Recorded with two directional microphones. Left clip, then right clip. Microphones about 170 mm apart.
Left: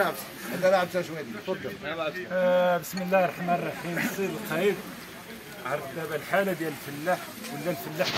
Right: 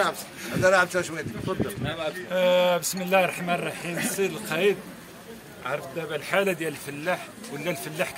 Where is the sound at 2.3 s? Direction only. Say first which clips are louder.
Right 2 dB; 10° right (ahead or behind).